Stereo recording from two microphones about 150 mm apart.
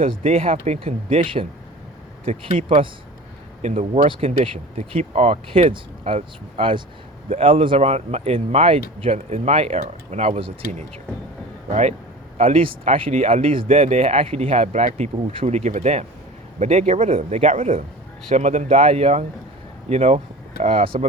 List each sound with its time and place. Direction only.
0.2 s speech: 40° right (ahead or behind)
3.6 s speech: 50° right (ahead or behind)